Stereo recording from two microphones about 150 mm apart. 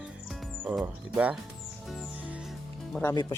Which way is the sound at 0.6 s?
5° right (ahead or behind).